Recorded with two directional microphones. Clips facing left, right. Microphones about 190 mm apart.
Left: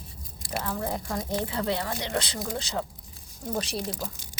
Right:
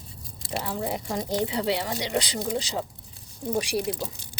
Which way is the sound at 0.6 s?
15° right (ahead or behind).